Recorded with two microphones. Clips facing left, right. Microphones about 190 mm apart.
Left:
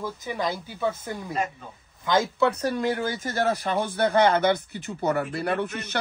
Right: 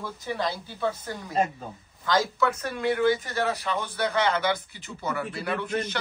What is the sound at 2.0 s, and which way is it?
Speech, 25° left (ahead or behind).